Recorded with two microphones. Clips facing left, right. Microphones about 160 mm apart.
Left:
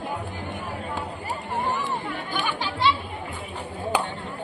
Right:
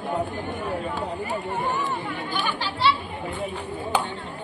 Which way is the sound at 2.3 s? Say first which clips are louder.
Left 1 dB; 15° left (ahead or behind).